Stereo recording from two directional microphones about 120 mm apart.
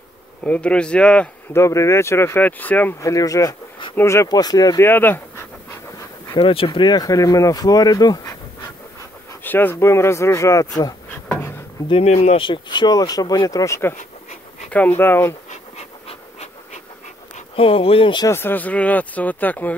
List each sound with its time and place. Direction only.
0.4 s speech: 10° left (ahead or behind)
1.5 s speech: 25° left (ahead or behind)
3.0 s speech: 30° left (ahead or behind)
4.8 s dog: 15° left (ahead or behind)
6.3 s speech: 50° left (ahead or behind); by 8.7 s 35° left (ahead or behind)
9.3 s speech: 15° left (ahead or behind)
11.1 s a sound: 15° left (ahead or behind)
11.9 s speech: 55° left (ahead or behind); by 15.3 s 20° left (ahead or behind)
15.5 s pant: 65° left (ahead or behind)
17.6 s speech: 50° left (ahead or behind)
18.2 s speech: 20° left (ahead or behind)